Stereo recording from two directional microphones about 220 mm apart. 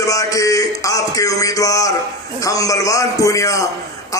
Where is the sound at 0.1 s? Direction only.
15° left (ahead or behind).